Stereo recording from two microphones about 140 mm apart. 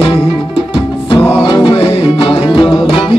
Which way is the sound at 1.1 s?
35° left (ahead or behind).